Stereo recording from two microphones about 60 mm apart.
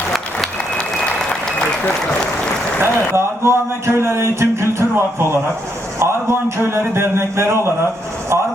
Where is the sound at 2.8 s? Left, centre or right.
Right.